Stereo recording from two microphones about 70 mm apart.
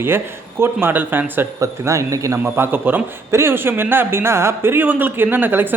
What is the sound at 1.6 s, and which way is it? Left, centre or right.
Speech, right.